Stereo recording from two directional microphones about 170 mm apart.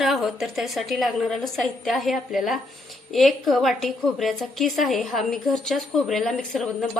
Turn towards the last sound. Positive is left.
turn(degrees=5)  # may be behind; listen again after turning